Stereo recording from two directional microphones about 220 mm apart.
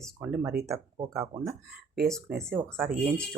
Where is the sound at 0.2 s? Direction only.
10° right (ahead or behind).